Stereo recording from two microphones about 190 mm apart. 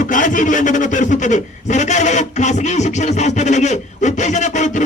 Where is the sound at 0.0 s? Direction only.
45° left (ahead or behind).